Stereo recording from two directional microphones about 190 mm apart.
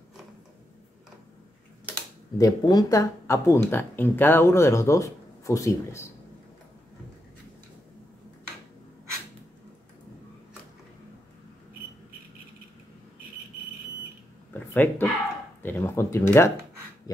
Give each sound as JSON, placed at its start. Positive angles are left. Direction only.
{"t": 2.3, "sound": "speech", "side_deg": 20}
{"t": 14.5, "sound": "a sound", "side_deg": 10}
{"t": 15.6, "sound": "speech", "side_deg": 10}